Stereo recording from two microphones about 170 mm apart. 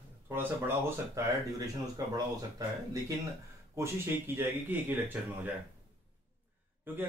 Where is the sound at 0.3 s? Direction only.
15° right (ahead or behind).